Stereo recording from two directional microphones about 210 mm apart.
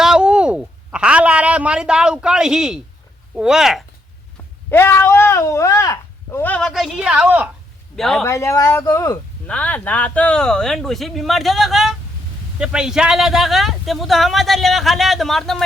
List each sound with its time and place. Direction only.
0.0 s speech: 5° right (ahead or behind)
4.7 s speech: 10° left (ahead or behind)
8.3 s speech: 15° left (ahead or behind)